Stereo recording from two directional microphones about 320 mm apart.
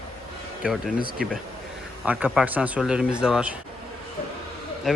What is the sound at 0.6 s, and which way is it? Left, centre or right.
Speech, centre.